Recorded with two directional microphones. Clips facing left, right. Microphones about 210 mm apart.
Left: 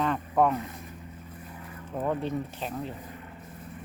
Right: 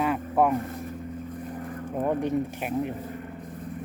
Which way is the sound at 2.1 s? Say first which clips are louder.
Right 4 dB; 15° right (ahead or behind).